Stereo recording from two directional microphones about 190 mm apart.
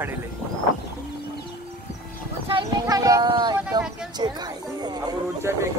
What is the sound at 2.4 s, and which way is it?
Speech, 25° right (ahead or behind).